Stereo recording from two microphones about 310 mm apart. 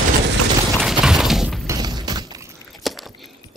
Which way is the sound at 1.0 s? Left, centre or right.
Centre.